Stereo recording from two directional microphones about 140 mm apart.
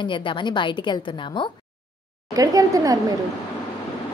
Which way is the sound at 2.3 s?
25° right (ahead or behind).